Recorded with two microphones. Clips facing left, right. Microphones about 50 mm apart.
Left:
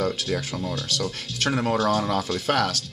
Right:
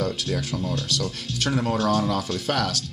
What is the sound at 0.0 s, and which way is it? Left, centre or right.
Speech, centre.